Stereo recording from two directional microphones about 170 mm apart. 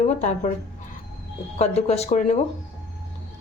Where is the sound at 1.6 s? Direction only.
40° left (ahead or behind).